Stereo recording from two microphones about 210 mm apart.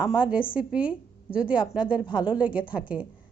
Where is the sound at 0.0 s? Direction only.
5° right (ahead or behind).